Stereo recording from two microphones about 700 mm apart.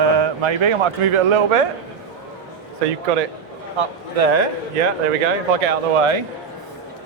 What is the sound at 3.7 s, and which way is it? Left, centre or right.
Speech, right.